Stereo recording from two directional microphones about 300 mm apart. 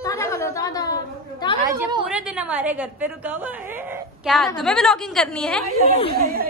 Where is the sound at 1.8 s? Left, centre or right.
Centre.